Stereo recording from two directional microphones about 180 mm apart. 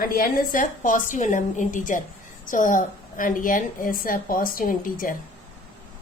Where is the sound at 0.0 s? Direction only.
55° left (ahead or behind).